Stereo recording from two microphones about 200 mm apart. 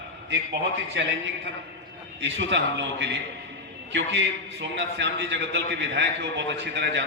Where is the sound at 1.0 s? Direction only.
60° right (ahead or behind).